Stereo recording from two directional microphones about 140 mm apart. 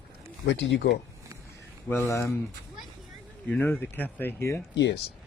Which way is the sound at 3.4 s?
15° left (ahead or behind).